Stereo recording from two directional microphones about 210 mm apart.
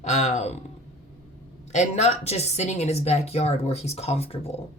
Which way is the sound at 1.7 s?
35° left (ahead or behind).